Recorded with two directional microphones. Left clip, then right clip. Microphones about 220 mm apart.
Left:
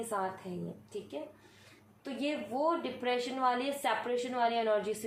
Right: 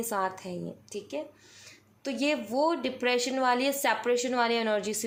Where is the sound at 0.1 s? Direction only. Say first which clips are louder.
Right 5 dB; 55° right (ahead or behind).